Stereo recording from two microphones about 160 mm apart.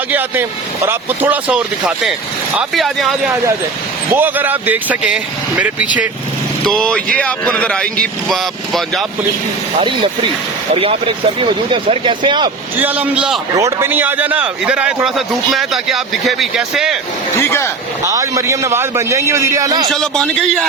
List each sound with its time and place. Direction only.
0.1 s speech: 10° right (ahead or behind)
4.1 s speech: 10° right (ahead or behind)
6.7 s speech: 5° left (ahead or behind)
10.8 s speech: 35° right (ahead or behind)
12.8 s speech: 10° right (ahead or behind)
13.6 s speech: 15° right (ahead or behind)
17.4 s speech: 15° left (ahead or behind)
18.0 s a man's voice: 20° right (ahead or behind)
19.9 s speech: 5° left (ahead or behind)